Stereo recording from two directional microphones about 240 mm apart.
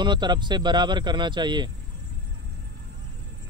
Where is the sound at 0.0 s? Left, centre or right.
Centre.